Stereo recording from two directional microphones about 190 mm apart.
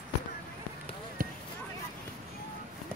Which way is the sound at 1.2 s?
45° right (ahead or behind).